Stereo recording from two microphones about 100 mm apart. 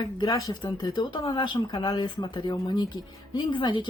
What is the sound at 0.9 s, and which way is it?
Speech, 50° left (ahead or behind).